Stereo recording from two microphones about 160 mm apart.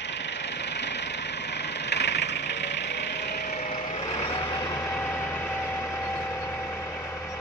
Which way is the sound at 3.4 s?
50° left (ahead or behind).